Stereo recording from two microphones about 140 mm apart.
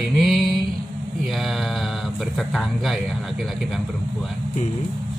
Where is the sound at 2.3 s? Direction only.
Centre (ahead or behind).